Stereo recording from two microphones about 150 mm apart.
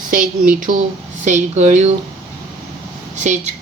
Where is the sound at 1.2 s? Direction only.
50° right (ahead or behind).